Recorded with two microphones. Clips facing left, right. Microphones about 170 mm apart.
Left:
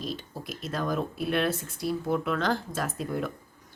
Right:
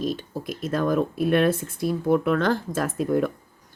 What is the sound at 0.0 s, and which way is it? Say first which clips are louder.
Speech: right 8 dB; 50° right (ahead or behind).